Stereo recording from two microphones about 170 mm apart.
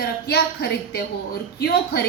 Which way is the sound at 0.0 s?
75° left (ahead or behind).